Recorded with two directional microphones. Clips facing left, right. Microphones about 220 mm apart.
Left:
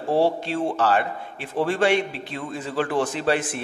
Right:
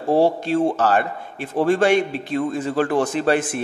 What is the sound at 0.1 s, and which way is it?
A man's voice, 45° right (ahead or behind).